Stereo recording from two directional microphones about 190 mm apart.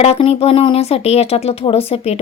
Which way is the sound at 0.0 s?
30° left (ahead or behind).